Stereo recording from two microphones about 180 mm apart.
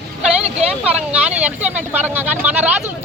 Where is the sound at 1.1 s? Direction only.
5° right (ahead or behind).